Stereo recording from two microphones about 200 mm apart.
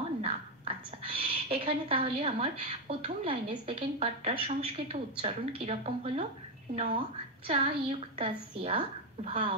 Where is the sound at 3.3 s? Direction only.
25° right (ahead or behind).